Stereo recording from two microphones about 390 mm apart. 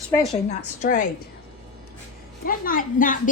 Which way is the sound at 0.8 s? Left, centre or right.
Left.